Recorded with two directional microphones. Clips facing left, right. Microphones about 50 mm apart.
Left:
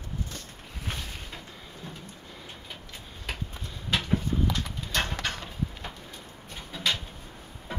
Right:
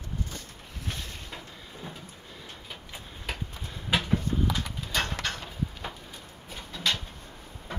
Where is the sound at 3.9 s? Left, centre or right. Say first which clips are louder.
Right 1 dB; centre.